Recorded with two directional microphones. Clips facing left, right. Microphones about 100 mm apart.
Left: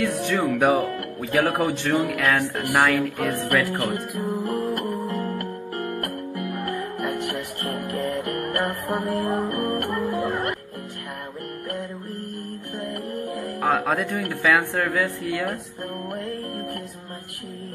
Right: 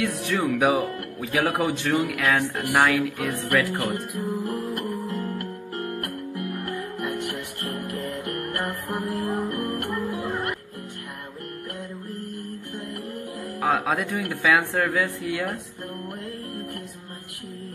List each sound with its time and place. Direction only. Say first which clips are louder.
0.0 s a woman's voice: left 2 dB; centre (ahead or behind)
4.5 s music: left 3 dB; 40° left (ahead or behind)
6.8 s music: left 2 dB; 45° left (ahead or behind)
9.1 s music: left 3 dB; 90° left
9.5 s music: left 3 dB; 45° left (ahead or behind)
12.8 s music: left 7 dB; 65° left (ahead or behind)
13.6 s a woman's voice: left 1 dB; centre (ahead or behind)